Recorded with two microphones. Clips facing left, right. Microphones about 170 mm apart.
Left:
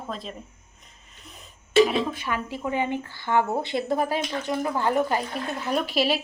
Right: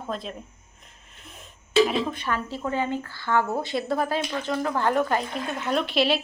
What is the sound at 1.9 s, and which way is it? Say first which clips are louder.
A woman's voice: even; 5° left (ahead or behind).